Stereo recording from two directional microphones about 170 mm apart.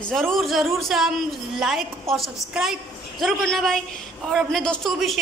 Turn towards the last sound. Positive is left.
turn(degrees=0)  # may be behind; listen again after turning